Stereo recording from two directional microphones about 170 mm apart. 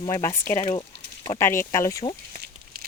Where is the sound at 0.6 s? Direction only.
30° left (ahead or behind).